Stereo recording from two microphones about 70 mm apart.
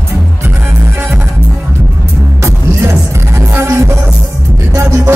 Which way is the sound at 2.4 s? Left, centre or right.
Right.